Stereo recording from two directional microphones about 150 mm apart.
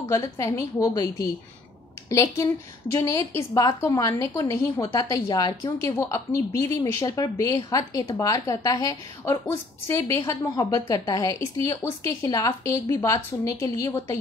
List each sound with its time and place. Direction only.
0.1 s a woman's voice: 20° left (ahead or behind)